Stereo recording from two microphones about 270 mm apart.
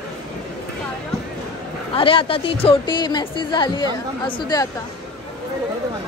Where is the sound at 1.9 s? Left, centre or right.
Centre.